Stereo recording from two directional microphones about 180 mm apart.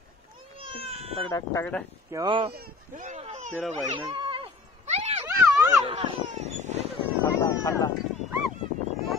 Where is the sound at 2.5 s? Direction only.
50° right (ahead or behind).